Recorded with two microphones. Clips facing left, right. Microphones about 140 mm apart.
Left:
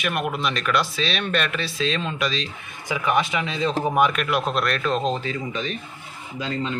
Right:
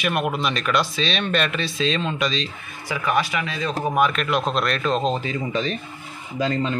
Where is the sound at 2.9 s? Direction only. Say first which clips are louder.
Even; 20° left (ahead or behind).